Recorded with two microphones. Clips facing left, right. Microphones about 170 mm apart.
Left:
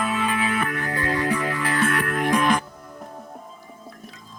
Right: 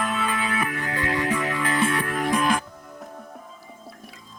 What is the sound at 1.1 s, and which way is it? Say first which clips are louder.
Music: left 1 dB; 20° right (ahead or behind).